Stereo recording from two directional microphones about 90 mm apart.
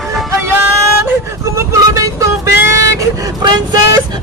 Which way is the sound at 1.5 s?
35° right (ahead or behind).